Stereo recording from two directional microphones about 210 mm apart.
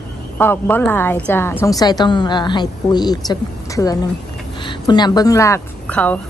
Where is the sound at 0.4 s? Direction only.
10° left (ahead or behind).